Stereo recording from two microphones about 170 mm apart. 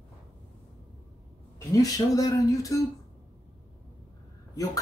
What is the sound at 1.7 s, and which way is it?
Speech, 20° left (ahead or behind).